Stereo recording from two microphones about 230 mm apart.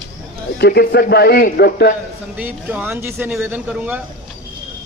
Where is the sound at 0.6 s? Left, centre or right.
Left.